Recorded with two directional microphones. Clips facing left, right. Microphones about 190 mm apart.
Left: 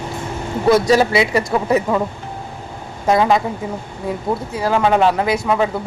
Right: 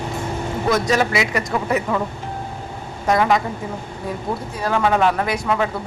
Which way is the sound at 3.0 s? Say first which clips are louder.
Left 3 dB; 25° left (ahead or behind).